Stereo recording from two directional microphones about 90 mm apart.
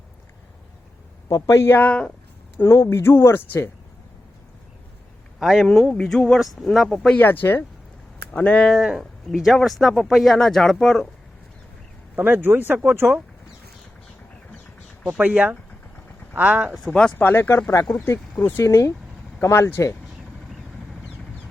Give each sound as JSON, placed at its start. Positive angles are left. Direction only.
{"t": 1.3, "sound": "speech", "side_deg": 30}
{"t": 2.6, "sound": "speech", "side_deg": 30}
{"t": 5.4, "sound": "speech", "side_deg": -5}
{"t": 5.6, "sound": "speech", "side_deg": 10}
{"t": 7.2, "sound": "speech", "side_deg": 20}
{"t": 8.3, "sound": "speech", "side_deg": 10}
{"t": 12.1, "sound": "a man's voice", "side_deg": -20}
{"t": 15.2, "sound": "speech", "side_deg": -15}
{"t": 17.2, "sound": "speech", "side_deg": 20}
{"t": 18.6, "sound": "speech", "side_deg": 35}